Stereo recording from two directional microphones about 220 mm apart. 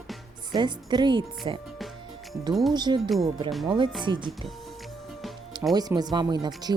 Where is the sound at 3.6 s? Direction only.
20° right (ahead or behind).